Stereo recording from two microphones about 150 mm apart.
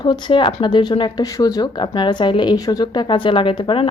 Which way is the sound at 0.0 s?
30° left (ahead or behind).